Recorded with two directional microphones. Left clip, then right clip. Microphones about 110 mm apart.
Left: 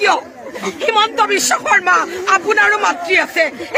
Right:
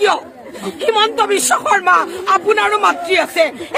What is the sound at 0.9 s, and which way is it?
A man's voice, 20° right (ahead or behind).